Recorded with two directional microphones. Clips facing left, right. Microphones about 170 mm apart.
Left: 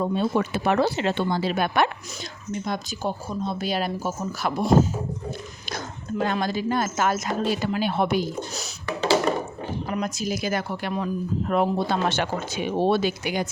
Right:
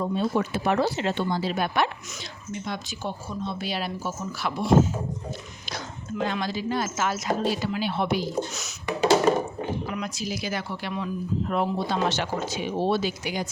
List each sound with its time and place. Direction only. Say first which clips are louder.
0.0 s speech: left 2 dB; 65° left (ahead or behind)
2.5 s speech: left 4 dB; 40° left (ahead or behind)
8.9 s a sound: right 1 dB; 15° right (ahead or behind)
9.6 s speech: left 2 dB; 40° left (ahead or behind); by 13.5 s 60° left (ahead or behind)